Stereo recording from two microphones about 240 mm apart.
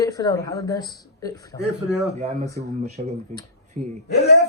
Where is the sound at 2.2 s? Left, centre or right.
Right.